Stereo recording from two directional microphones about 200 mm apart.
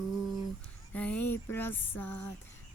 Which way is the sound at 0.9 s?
5° left (ahead or behind).